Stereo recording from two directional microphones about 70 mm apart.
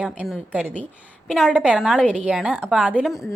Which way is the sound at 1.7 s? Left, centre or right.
Centre.